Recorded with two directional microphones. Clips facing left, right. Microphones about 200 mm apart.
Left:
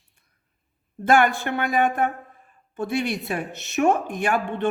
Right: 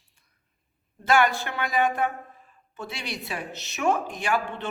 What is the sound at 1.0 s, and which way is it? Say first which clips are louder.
A man's voice: left 3 dB; 50° left (ahead or behind).